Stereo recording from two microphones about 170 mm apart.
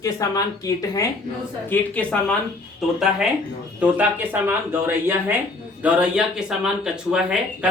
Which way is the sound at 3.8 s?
10° right (ahead or behind).